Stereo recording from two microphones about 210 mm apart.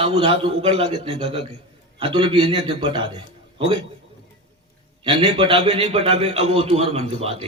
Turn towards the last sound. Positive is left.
turn(degrees=-30)  # may be behind; listen again after turning